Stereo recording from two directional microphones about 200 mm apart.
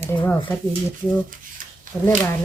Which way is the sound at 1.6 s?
40° right (ahead or behind).